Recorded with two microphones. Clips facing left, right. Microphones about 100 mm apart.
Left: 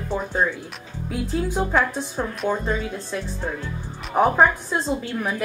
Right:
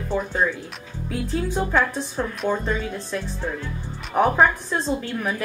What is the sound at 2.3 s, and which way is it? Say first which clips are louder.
Speech: even; centre (ahead or behind).